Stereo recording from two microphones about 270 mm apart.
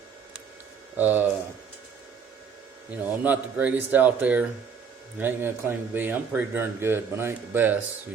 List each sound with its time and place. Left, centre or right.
0.9 s speech: centre
2.9 s speech: centre